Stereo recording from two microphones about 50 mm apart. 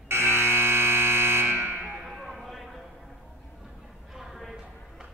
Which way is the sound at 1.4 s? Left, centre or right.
Right.